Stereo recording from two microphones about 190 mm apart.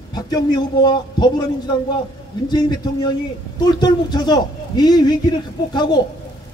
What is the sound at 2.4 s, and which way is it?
A man's voice, 20° left (ahead or behind).